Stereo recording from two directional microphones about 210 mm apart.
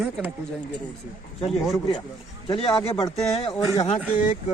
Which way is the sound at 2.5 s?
25° left (ahead or behind).